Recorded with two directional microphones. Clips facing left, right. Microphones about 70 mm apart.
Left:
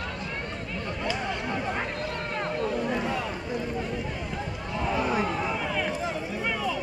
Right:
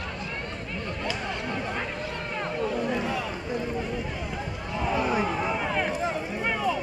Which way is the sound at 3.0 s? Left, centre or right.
Centre.